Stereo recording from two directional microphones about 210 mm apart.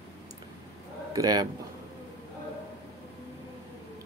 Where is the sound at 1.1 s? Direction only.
15° right (ahead or behind).